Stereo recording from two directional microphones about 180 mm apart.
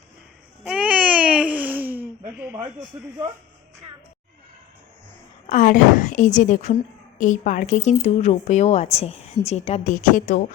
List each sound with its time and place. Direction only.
0.6 s babbling: 5° right (ahead or behind)
5.5 s a woman's voice: 45° left (ahead or behind)